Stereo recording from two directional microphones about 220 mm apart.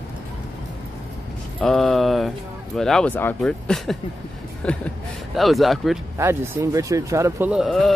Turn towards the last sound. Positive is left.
turn(degrees=0)  # may be behind; listen again after turning